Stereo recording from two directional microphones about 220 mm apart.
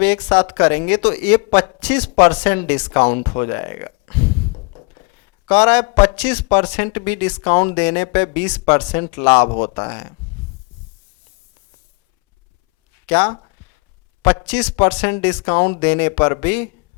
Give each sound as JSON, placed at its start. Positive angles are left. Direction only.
{"t": 0.0, "sound": "speech", "side_deg": 20}
{"t": 1.8, "sound": "speech", "side_deg": 10}
{"t": 2.1, "sound": "speech", "side_deg": 20}
{"t": 4.5, "sound": "a sound", "side_deg": 30}
{"t": 5.5, "sound": "speech", "side_deg": 20}
{"t": 6.1, "sound": "speech", "side_deg": 10}
{"t": 8.6, "sound": "speech", "side_deg": 20}
{"t": 13.1, "sound": "a man's voice", "side_deg": 20}
{"t": 14.4, "sound": "speech", "side_deg": 5}
{"t": 15.2, "sound": "speech", "side_deg": 20}
{"t": 15.8, "sound": "speech", "side_deg": 15}